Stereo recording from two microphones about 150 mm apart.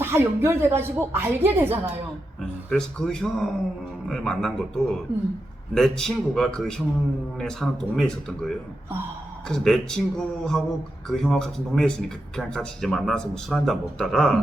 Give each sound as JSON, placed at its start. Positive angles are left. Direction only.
{"t": 0.0, "sound": "speech", "side_deg": -15}
{"t": 2.6, "sound": "speech", "side_deg": 5}